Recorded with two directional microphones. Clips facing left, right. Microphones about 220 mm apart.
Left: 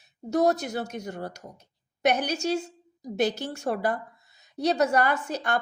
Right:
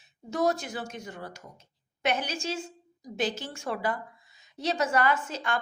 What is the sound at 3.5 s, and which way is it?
Speech, 45° left (ahead or behind).